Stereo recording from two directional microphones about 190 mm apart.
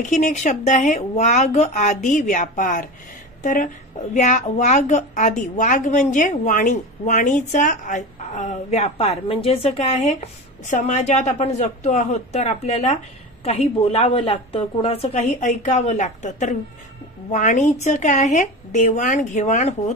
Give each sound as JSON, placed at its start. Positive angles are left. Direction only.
{"t": 0.0, "sound": "a woman's voice", "side_deg": 40}